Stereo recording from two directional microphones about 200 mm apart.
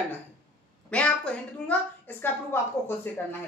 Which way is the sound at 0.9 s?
5° left (ahead or behind).